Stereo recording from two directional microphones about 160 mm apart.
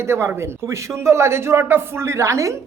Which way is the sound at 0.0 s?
15° right (ahead or behind).